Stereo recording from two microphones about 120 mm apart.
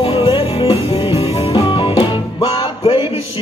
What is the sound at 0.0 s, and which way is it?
Music, 50° left (ahead or behind).